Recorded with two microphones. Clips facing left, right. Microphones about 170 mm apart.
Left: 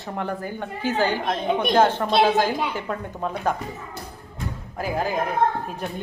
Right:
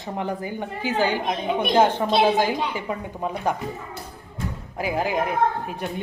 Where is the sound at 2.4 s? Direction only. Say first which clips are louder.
Even; 10° right (ahead or behind).